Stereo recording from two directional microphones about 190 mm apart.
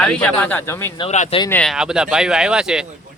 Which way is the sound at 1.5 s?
10° left (ahead or behind).